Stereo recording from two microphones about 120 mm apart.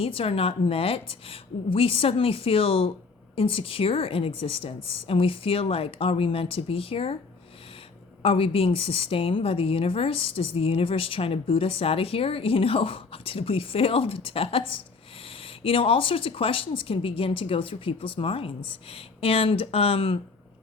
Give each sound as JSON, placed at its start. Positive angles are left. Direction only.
{"t": 0.0, "sound": "a woman's voice", "side_deg": 50}
{"t": 8.2, "sound": "a woman's voice", "side_deg": 50}